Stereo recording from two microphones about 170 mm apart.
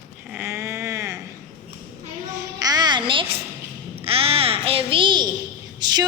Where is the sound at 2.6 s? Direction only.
25° right (ahead or behind).